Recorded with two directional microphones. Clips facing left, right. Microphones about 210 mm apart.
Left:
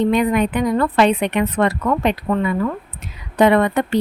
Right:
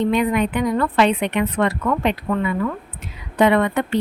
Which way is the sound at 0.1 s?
40° left (ahead or behind).